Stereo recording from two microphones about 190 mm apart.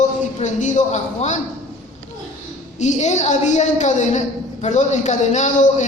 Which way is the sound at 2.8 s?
40° left (ahead or behind).